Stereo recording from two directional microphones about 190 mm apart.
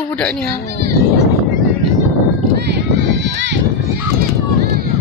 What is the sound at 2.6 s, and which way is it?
Sheep, 65° right (ahead or behind).